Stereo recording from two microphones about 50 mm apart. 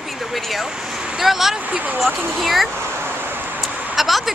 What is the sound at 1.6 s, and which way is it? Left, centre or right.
Speech, right.